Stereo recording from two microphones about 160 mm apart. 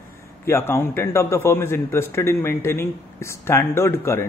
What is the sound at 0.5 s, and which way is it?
A man's voice, 15° left (ahead or behind).